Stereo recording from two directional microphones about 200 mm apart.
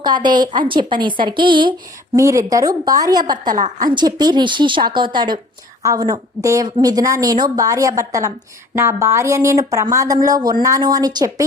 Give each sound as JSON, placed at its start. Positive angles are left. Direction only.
{"t": 0.0, "sound": "a woman's voice", "side_deg": -20}